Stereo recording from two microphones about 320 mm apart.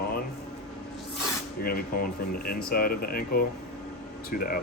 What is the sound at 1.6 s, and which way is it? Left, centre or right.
Speech, left.